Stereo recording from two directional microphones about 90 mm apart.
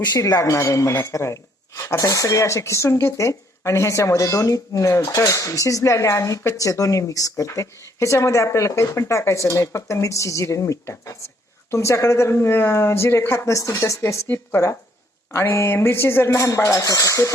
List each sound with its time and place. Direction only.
0.2 s speech: 40° left (ahead or behind)